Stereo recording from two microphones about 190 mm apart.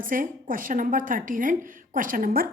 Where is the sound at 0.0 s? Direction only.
45° right (ahead or behind).